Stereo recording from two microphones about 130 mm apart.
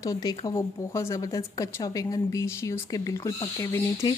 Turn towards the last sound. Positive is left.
turn(degrees=20)  # may be behind; listen again after turning